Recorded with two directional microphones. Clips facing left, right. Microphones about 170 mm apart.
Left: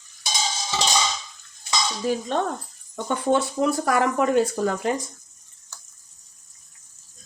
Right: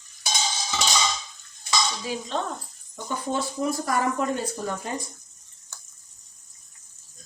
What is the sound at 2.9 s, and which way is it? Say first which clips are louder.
Speech: left 7 dB; 70° left (ahead or behind).